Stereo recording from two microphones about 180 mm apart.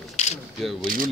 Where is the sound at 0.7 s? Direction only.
50° right (ahead or behind).